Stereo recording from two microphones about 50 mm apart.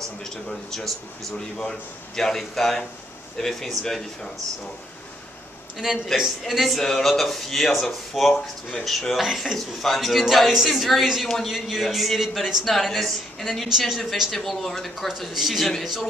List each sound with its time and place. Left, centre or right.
0.2 s a man's voice: centre
6.1 s a man's voice: centre
9.2 s a man's voice: centre
14.3 s a man's voice: centre